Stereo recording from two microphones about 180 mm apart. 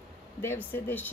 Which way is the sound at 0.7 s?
10° left (ahead or behind).